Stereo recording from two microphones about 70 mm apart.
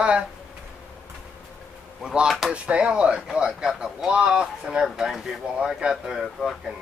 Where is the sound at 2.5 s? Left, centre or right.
Centre.